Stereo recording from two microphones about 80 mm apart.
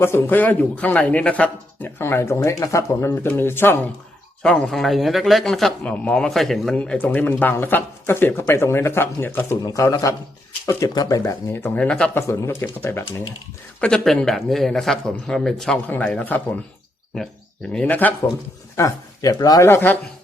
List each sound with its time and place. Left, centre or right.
0.0 s a man's voice: left
1.8 s speech: left
3.2 s a man's voice: left
4.4 s speech: centre
5.8 s speech: centre
6.7 s a man's voice: centre; by 9.6 s left
9.6 s speech: left
11.2 s speech: left
11.6 s speech: centre
12.1 s speech: left
13.8 s a man's voice: centre; by 16.6 s left
17.7 s a man's voice: centre
18.8 s speech: left
19.6 s a man's voice: left